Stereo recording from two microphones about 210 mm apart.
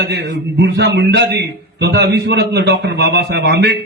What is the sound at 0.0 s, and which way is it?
A man's voice, 55° right (ahead or behind).